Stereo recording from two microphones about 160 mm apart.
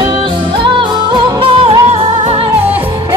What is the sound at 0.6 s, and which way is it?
Music, 30° right (ahead or behind).